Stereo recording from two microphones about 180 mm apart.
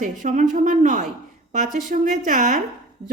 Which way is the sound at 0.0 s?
45° right (ahead or behind).